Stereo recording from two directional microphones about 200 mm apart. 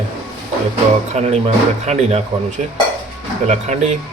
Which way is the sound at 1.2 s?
35° right (ahead or behind).